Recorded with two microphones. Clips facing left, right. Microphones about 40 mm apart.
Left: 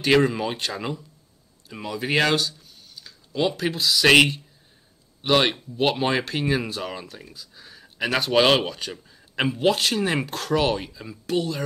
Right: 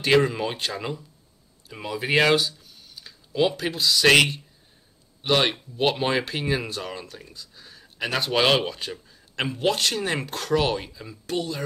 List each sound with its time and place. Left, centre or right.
0.0 s speech: centre
3.3 s speech: centre
9.1 s speech: centre